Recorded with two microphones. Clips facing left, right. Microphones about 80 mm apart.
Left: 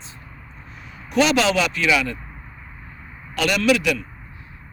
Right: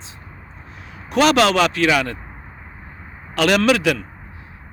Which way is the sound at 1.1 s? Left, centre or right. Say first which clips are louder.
Right 3 dB; right.